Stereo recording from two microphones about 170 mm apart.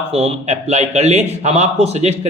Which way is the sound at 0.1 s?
35° right (ahead or behind).